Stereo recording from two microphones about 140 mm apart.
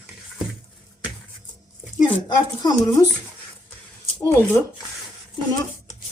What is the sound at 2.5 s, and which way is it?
Speech, 30° left (ahead or behind).